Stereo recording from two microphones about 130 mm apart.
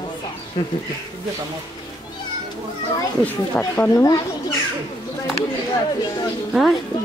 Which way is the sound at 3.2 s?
15° left (ahead or behind).